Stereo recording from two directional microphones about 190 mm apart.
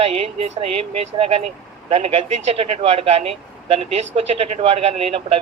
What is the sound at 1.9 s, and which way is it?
Speech, 30° right (ahead or behind).